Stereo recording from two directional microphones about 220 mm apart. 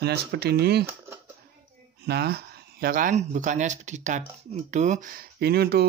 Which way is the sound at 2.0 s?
45° right (ahead or behind).